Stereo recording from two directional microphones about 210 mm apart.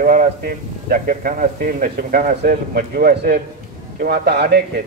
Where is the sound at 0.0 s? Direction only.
40° right (ahead or behind).